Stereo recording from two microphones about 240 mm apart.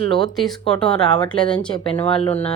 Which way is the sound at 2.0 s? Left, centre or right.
Left.